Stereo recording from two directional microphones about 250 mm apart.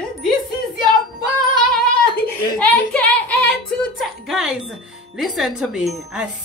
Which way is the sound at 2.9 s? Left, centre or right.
Centre.